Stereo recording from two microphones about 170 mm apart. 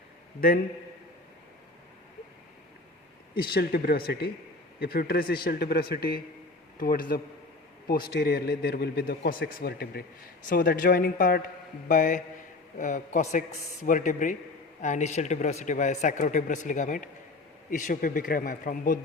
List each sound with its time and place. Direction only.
3.3 s a man's voice: 65° left (ahead or behind)